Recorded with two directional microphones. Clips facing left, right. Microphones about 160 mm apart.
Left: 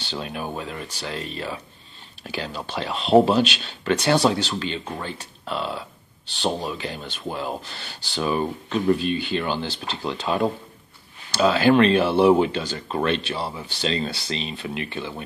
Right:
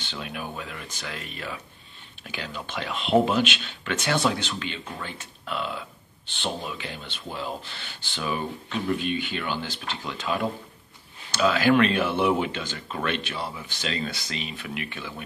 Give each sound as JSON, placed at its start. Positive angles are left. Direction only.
{"t": 0.0, "sound": "speech", "side_deg": 35}